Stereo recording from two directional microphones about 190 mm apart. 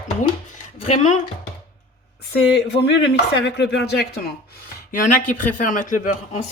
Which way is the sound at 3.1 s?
65° left (ahead or behind).